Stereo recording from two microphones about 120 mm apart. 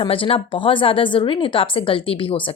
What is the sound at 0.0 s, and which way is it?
A woman's voice, 50° left (ahead or behind).